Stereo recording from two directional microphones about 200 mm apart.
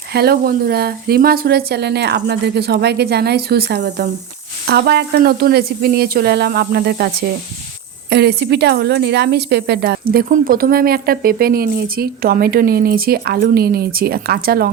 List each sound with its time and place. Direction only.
0.1 s a woman's voice: 50° right (ahead or behind)
8.1 s a woman's voice: 55° right (ahead or behind)